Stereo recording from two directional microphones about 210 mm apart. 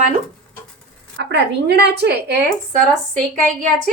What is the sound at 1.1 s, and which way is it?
A woman's voice, 55° right (ahead or behind).